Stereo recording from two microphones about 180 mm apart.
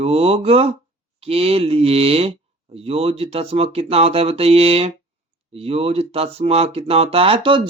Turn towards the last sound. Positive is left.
turn(degrees=-30)  # may be behind; listen again after turning